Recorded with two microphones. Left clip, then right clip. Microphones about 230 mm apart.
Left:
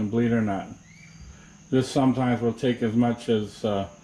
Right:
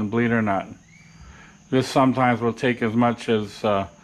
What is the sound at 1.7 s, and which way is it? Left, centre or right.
Speech, right.